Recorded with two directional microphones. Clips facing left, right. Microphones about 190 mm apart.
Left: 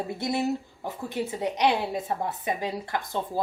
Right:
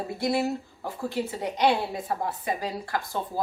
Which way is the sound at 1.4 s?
20° left (ahead or behind).